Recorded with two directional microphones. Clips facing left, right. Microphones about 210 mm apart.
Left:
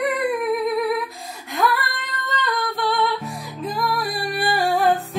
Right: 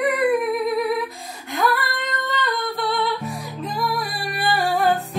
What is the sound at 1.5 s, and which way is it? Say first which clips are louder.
Female singing: even; centre (ahead or behind).